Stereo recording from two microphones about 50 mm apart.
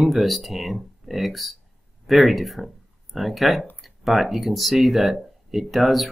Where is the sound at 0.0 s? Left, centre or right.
Centre.